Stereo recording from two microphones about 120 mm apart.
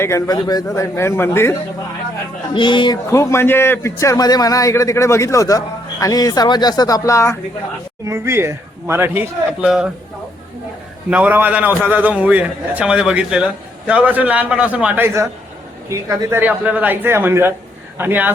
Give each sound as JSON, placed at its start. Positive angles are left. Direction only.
{"t": 0.0, "sound": "a man's voice", "side_deg": 25}
{"t": 2.5, "sound": "speech", "side_deg": 40}
{"t": 3.1, "sound": "a man's voice", "side_deg": 20}
{"t": 8.0, "sound": "speech", "side_deg": -20}
{"t": 11.1, "sound": "a man's voice", "side_deg": -15}